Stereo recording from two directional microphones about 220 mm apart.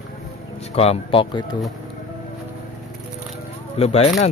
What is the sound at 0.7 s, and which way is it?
Speech, 25° left (ahead or behind).